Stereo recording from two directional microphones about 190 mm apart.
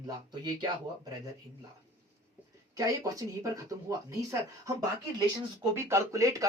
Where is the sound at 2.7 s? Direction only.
20° right (ahead or behind).